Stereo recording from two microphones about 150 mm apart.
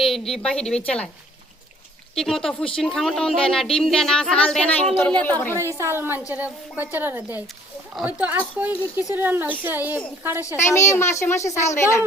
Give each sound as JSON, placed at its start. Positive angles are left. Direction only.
{"t": 0.0, "sound": "speech", "side_deg": 0}
{"t": 2.1, "sound": "speech", "side_deg": 5}
{"t": 5.5, "sound": "a woman's voice", "side_deg": -20}
{"t": 10.6, "sound": "a child's voice", "side_deg": 20}